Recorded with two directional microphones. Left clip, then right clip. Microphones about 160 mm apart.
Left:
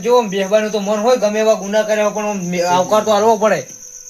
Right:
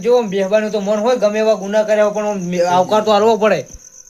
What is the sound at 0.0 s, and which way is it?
Speech, 35° right (ahead or behind).